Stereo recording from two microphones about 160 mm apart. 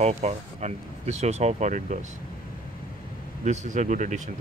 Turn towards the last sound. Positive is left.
turn(degrees=-50)  # may be behind; listen again after turning